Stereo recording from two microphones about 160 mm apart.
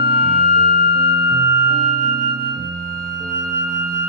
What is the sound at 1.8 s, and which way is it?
Music, 55° right (ahead or behind).